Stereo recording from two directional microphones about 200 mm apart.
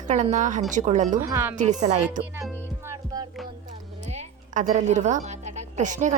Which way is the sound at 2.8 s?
20° right (ahead or behind).